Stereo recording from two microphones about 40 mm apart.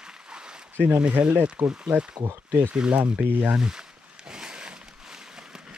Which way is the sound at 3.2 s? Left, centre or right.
Right.